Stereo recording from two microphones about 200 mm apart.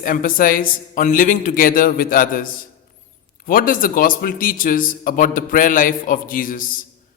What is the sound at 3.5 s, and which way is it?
A man's voice, 45° left (ahead or behind).